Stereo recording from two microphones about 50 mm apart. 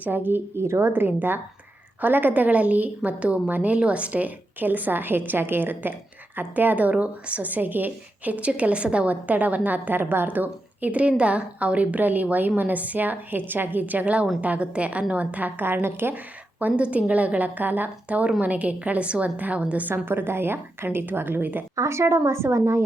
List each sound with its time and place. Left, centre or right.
0.0 s a woman's voice: right
0.5 s a woman's voice: right
6.9 s a woman's voice: right
10.2 s a woman's voice: right
16.1 s a woman's voice: right
19.9 s a woman's voice: right
21.8 s a woman's voice: right